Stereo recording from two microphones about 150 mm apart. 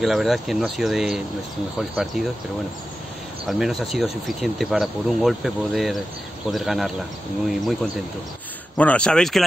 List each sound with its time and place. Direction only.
0.0 s speech: centre (ahead or behind)
3.4 s speech: centre (ahead or behind)